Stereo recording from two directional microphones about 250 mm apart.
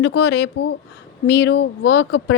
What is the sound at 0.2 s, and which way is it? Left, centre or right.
Speech, left.